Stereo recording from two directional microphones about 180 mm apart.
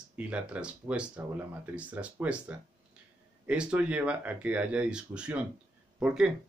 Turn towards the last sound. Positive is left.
turn(degrees=-5)  # may be behind; listen again after turning